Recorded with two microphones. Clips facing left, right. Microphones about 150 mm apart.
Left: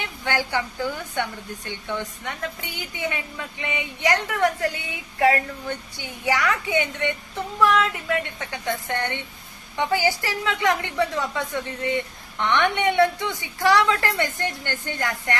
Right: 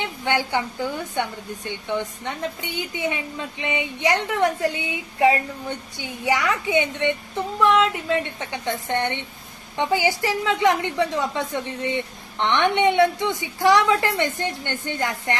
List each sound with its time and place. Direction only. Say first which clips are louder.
0.0 s a woman's voice: right 3 dB; 20° right (ahead or behind)
12.5 s a woman's voice: right 2 dB; 20° right (ahead or behind)